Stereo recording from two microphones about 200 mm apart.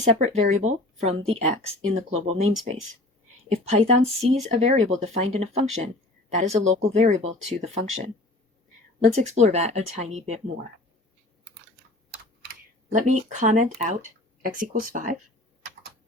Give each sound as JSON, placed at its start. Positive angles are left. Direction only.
{"t": 0.0, "sound": "speech", "side_deg": -35}
{"t": 9.4, "sound": "speech", "side_deg": -35}
{"t": 12.9, "sound": "speech", "side_deg": -40}